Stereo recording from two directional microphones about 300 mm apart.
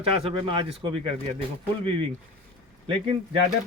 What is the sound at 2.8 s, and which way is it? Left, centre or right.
Speech, centre.